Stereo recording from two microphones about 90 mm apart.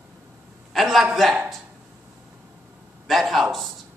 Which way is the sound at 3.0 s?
Centre (ahead or behind).